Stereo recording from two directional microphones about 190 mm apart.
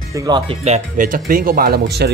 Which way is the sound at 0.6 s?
40° right (ahead or behind).